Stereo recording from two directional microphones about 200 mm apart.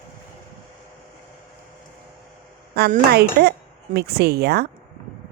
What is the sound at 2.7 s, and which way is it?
Speech, 50° right (ahead or behind).